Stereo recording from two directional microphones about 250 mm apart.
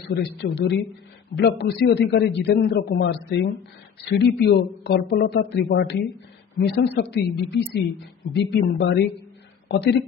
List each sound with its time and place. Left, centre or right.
0.1 s a man's voice: left